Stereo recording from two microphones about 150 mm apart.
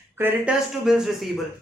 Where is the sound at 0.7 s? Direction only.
5° right (ahead or behind).